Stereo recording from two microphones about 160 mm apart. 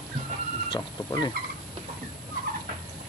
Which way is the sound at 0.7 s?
25° left (ahead or behind).